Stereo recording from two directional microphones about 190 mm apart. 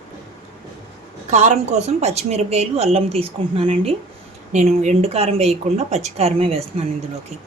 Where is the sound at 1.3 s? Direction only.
35° right (ahead or behind).